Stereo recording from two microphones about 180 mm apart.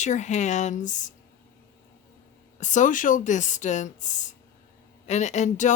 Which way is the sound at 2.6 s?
45° left (ahead or behind).